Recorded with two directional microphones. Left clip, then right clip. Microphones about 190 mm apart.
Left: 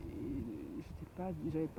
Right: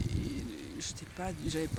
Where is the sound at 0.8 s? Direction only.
10° right (ahead or behind).